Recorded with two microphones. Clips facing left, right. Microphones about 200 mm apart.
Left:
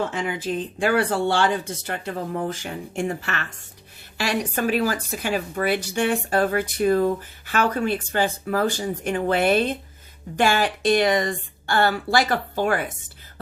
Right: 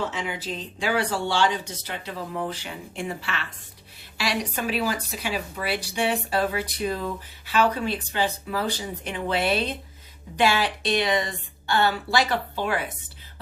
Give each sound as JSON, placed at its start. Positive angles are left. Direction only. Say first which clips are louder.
{"t": 0.1, "sound": "speech", "louder": "left 5 dB", "side_deg": 50}